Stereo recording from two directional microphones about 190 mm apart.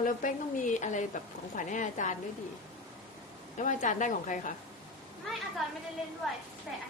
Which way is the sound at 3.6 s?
40° left (ahead or behind).